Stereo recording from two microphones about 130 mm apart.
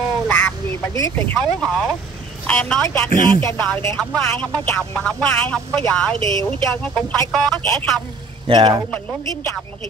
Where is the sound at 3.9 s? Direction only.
5° left (ahead or behind).